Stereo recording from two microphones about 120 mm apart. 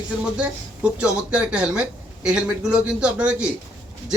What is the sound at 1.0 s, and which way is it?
A man's voice, 10° right (ahead or behind).